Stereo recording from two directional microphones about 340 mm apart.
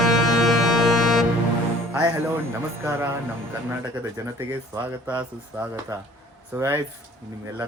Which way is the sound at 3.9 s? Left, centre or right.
Centre.